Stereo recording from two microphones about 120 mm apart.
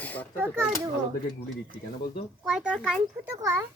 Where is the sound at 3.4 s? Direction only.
25° right (ahead or behind).